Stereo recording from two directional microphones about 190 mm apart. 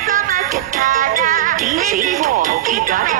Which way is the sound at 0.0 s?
45° right (ahead or behind).